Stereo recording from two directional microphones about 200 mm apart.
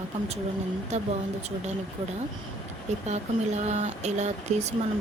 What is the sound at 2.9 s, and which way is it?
A woman's voice, 35° right (ahead or behind).